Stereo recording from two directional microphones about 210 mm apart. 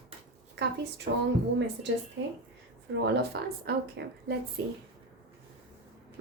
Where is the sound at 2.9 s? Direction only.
55° right (ahead or behind).